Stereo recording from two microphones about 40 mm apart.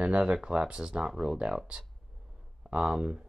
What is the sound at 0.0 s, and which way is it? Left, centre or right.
Speech, right.